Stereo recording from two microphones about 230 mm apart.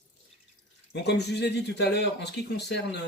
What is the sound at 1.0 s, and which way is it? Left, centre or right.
Speech, left.